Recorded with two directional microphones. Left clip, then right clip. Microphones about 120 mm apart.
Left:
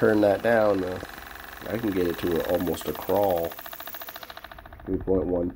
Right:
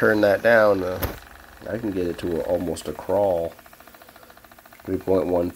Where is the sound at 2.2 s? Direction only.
40° left (ahead or behind).